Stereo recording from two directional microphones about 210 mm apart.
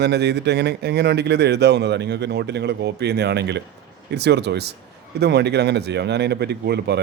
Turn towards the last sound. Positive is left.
turn(degrees=-50)  # may be behind; listen again after turning